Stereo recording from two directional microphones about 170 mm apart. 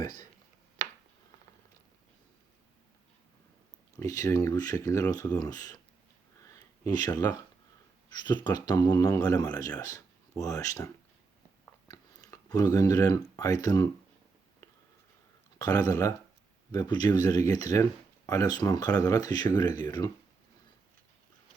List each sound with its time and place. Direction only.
3.9 s speech: 20° left (ahead or behind)
6.4 s a sound: 20° left (ahead or behind)
8.1 s speech: 25° left (ahead or behind)
15.5 s speech: 20° left (ahead or behind)